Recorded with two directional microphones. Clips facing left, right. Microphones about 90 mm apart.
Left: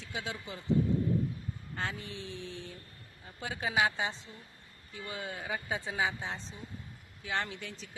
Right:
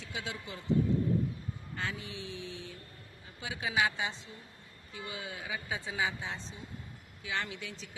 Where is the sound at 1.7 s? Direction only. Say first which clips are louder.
Left 1 dB; 40° left (ahead or behind).